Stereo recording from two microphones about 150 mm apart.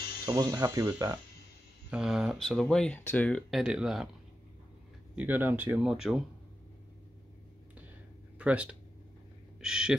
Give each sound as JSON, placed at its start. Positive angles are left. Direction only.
{"t": 0.2, "sound": "speech", "side_deg": -25}
{"t": 1.9, "sound": "speech", "side_deg": -5}
{"t": 5.1, "sound": "speech", "side_deg": -10}
{"t": 8.4, "sound": "speech", "side_deg": -10}